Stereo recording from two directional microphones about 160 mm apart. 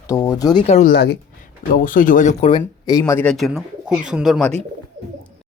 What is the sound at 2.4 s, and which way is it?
Speech, 30° left (ahead or behind).